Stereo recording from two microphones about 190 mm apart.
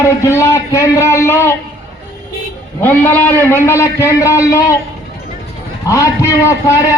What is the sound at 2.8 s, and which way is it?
A man's voice, 10° left (ahead or behind).